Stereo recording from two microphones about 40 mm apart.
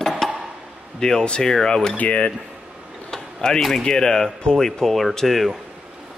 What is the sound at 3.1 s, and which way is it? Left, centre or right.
Speech, centre.